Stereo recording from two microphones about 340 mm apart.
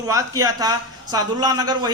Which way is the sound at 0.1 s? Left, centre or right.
Centre.